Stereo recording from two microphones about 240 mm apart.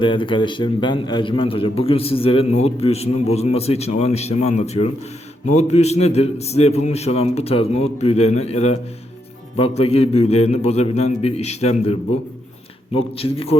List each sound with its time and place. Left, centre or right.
0.0 s a man's voice: centre